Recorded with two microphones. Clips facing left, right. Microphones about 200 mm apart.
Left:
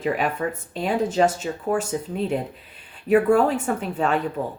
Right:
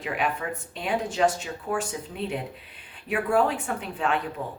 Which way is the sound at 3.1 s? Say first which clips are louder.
Left 7 dB; 40° left (ahead or behind).